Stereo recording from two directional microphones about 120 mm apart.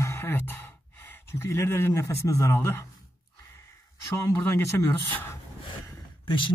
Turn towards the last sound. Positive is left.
turn(degrees=40)  # may be behind; listen again after turning